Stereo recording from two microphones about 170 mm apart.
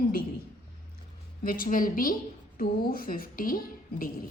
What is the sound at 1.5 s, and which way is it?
A woman's voice, 55° left (ahead or behind).